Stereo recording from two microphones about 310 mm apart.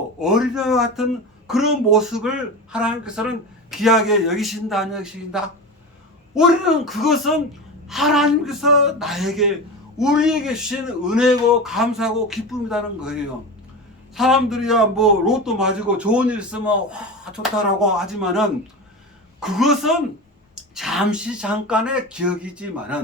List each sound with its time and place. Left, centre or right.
0.2 s a man's voice: centre
14.2 s a man's voice: centre